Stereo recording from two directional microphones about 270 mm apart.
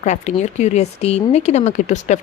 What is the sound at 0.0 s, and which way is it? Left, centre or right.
Speech, left.